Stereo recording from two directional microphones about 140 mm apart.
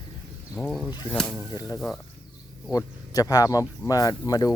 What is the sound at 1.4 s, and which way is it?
Speech, 25° left (ahead or behind).